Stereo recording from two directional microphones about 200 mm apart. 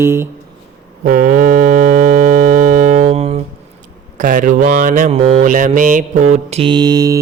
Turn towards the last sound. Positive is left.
turn(degrees=-20)  # may be behind; listen again after turning